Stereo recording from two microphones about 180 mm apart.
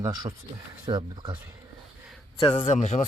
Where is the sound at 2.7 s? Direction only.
40° left (ahead or behind).